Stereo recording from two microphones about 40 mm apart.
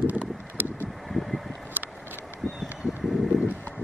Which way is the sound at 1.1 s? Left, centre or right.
Centre.